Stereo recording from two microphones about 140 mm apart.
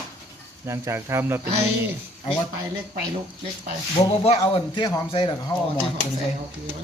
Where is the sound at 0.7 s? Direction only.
20° right (ahead or behind).